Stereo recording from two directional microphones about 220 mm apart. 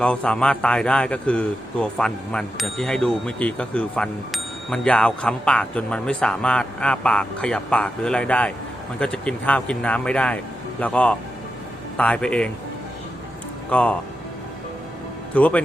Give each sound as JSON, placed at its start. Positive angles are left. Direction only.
{"t": 0.0, "sound": "a man's voice", "side_deg": 5}
{"t": 13.7, "sound": "a man's voice", "side_deg": 5}
{"t": 15.4, "sound": "speech", "side_deg": 5}